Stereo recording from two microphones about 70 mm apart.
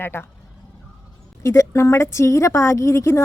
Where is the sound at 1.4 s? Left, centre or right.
Left.